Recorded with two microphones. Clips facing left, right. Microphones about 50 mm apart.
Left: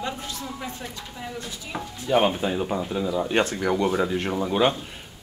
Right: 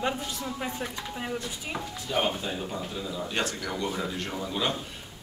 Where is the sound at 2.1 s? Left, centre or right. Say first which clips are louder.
Left 7 dB; left.